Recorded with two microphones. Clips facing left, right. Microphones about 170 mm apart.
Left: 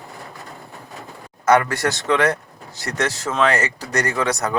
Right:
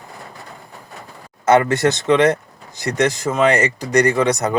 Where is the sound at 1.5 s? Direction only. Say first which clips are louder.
Right 3 dB; 20° right (ahead or behind).